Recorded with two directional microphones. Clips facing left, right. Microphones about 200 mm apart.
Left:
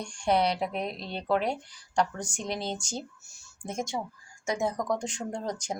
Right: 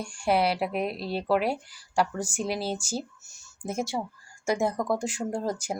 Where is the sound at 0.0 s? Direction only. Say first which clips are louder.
Right 1 dB; 5° right (ahead or behind).